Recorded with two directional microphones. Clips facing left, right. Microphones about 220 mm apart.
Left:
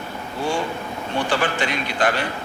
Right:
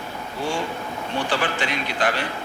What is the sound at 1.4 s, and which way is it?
Speech, 45° left (ahead or behind).